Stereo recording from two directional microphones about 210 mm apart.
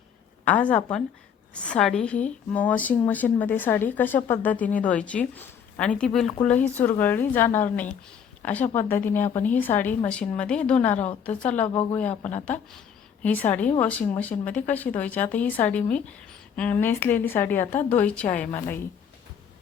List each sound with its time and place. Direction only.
0.4 s a woman's voice: 5° left (ahead or behind)
10.9 s a woman's voice: 30° left (ahead or behind)
11.3 s a woman's voice: 5° left (ahead or behind)
11.7 s speech: 20° left (ahead or behind)
11.9 s a woman's voice: 5° left (ahead or behind)